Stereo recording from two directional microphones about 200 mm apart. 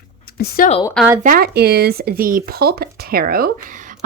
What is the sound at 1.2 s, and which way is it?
A woman's voice, 50° right (ahead or behind).